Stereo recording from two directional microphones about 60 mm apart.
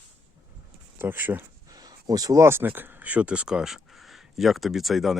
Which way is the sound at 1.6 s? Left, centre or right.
Right.